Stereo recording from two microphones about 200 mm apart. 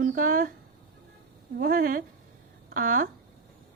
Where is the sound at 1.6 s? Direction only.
45° right (ahead or behind).